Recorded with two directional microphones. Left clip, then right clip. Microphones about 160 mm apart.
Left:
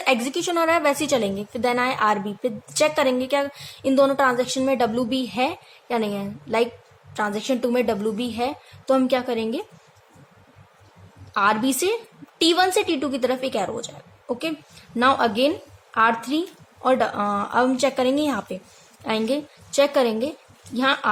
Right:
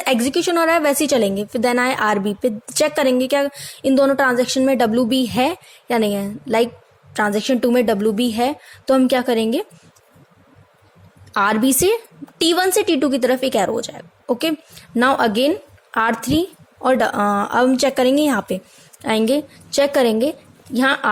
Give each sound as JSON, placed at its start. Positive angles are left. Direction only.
{"t": 0.0, "sound": "a woman's voice", "side_deg": -40}
{"t": 11.3, "sound": "a woman's voice", "side_deg": -45}